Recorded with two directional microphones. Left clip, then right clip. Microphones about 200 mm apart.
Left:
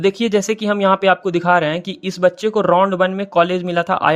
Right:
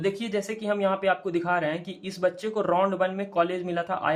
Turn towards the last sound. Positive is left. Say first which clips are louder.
# left 11 dB
turn(degrees=50)  # may be behind; listen again after turning